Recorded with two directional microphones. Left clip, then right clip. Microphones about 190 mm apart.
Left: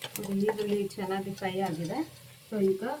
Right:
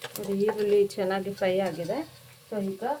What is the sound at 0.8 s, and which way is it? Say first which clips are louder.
Speech: right 6 dB; 45° right (ahead or behind).